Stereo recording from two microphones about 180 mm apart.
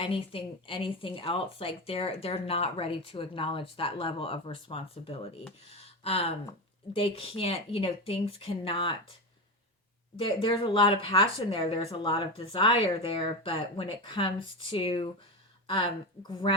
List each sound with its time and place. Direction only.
0.0 s a woman's voice: 30° left (ahead or behind)
10.2 s speech: 30° left (ahead or behind)